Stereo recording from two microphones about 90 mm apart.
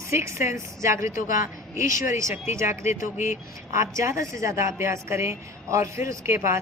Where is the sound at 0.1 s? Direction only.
30° right (ahead or behind).